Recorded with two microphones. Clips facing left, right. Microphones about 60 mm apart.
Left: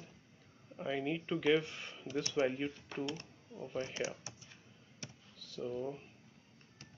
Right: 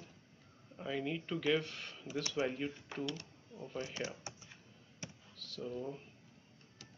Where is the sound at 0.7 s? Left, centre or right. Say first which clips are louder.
Left 2 dB; centre.